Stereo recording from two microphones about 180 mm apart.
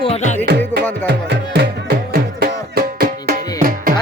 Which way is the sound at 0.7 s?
10° left (ahead or behind).